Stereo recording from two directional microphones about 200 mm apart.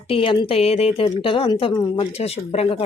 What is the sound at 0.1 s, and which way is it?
Speech, 25° left (ahead or behind).